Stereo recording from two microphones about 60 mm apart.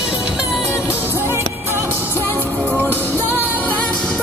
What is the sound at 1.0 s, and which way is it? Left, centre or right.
Music, right.